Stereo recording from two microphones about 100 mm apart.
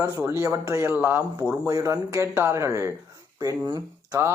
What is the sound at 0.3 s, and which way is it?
Speech, 30° right (ahead or behind).